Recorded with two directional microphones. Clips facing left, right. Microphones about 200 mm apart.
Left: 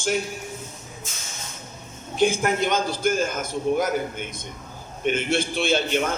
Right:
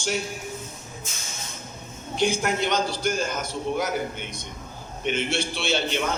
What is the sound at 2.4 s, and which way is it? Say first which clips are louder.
A man's voice: left 2 dB; 50° left (ahead or behind).